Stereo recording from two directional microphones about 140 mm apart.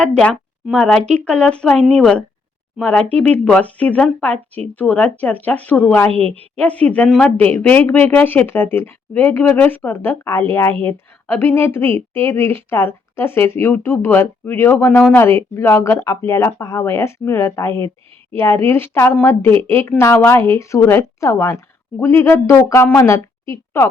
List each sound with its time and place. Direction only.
0.0 s a woman's voice: 5° left (ahead or behind)